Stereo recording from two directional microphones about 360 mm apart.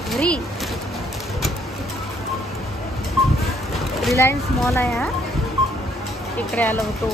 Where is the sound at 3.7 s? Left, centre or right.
Centre.